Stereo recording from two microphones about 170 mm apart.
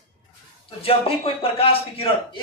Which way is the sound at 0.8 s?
35° left (ahead or behind).